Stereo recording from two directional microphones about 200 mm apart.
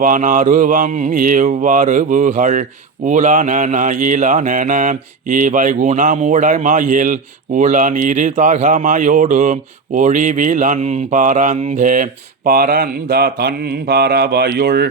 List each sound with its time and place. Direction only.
0.0 s mantra: 40° right (ahead or behind)
12.5 s speech: 45° right (ahead or behind)